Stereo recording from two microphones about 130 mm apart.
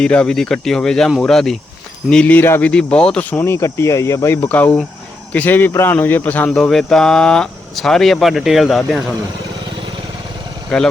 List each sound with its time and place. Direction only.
0.0 s speech: 5° left (ahead or behind); by 4.4 s 20° left (ahead or behind)
4.4 s speech: 10° left (ahead or behind)